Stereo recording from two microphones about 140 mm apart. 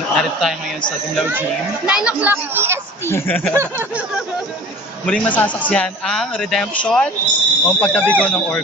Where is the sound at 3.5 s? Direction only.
20° right (ahead or behind).